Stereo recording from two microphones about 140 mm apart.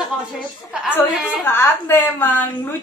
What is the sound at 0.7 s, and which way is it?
Speech, 5° right (ahead or behind).